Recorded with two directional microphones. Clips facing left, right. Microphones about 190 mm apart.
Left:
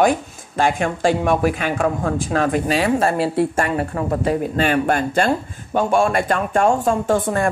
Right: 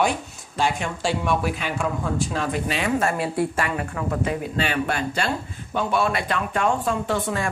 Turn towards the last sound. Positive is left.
turn(degrees=50)  # may be behind; listen again after turning